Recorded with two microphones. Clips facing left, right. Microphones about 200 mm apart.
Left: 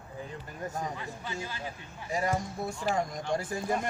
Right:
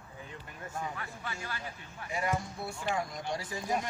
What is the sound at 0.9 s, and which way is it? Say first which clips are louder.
Speech: left 4 dB; 20° left (ahead or behind).